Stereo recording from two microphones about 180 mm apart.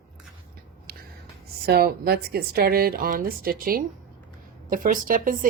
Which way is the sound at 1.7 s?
60° right (ahead or behind).